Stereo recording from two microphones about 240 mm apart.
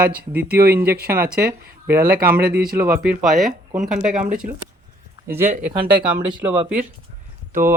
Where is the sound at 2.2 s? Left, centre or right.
Centre.